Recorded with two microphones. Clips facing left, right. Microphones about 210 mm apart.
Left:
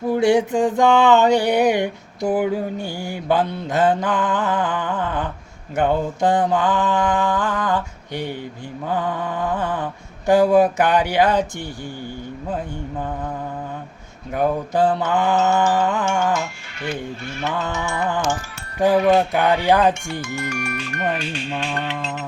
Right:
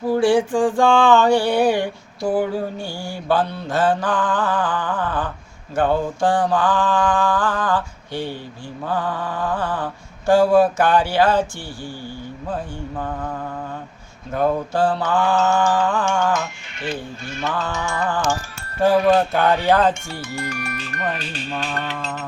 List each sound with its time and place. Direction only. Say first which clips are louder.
0.1 s mantra: even; 20° left (ahead or behind)
14.3 s mantra: even; 15° left (ahead or behind)
17.4 s mantra: even; 20° left (ahead or behind)
18.8 s speech: even; 15° left (ahead or behind)
20.2 s speech: even; 35° right (ahead or behind)